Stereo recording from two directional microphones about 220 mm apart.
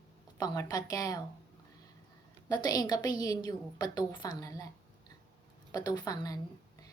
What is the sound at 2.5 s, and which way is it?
A woman's voice, 20° left (ahead or behind).